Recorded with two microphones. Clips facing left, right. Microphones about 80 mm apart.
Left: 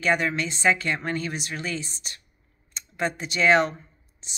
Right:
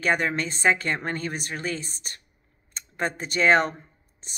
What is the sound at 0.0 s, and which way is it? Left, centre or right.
Speech, right.